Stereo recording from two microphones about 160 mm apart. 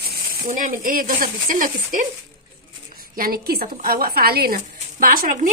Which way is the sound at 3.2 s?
65° right (ahead or behind).